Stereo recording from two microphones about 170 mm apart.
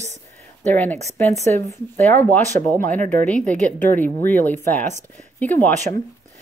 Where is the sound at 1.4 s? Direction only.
15° left (ahead or behind).